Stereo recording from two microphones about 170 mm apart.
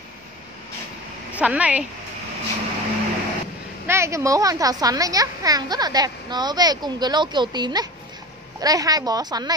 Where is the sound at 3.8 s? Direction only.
15° right (ahead or behind).